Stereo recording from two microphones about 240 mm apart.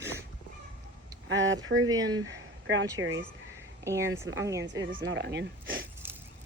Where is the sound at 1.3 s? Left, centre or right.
Right.